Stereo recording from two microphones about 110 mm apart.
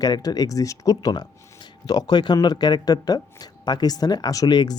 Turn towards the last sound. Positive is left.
turn(degrees=40)  # may be behind; listen again after turning